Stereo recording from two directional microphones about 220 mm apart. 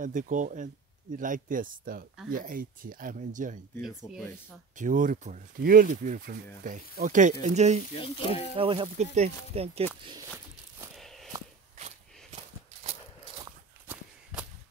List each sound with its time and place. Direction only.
0.0 s speech: 35° right (ahead or behind)
4.0 s speech: 10° left (ahead or behind)
4.7 s speech: 35° right (ahead or behind)
7.9 s speech: 25° left (ahead or behind)
8.5 s speech: 25° right (ahead or behind)
11.0 s walk: centre (ahead or behind)
11.7 s walk: 30° right (ahead or behind)